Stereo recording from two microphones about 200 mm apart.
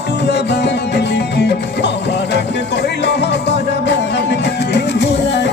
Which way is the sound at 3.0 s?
60° left (ahead or behind).